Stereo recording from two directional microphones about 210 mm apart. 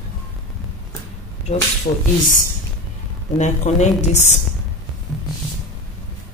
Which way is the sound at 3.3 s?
30° left (ahead or behind).